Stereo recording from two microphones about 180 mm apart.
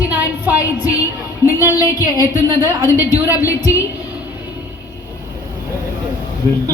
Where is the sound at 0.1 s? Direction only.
10° right (ahead or behind).